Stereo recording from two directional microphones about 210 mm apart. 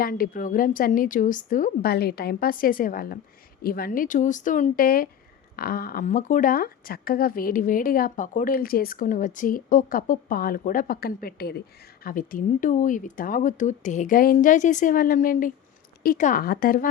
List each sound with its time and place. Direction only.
0.0 s speech: 45° left (ahead or behind)